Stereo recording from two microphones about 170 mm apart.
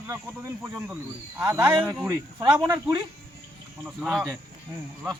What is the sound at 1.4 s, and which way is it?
Speech, 15° right (ahead or behind).